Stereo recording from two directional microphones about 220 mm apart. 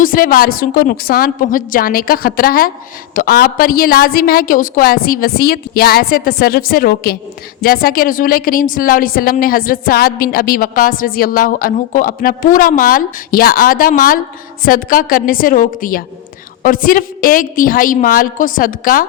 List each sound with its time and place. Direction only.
0.0 s a woman's voice: 40° left (ahead or behind)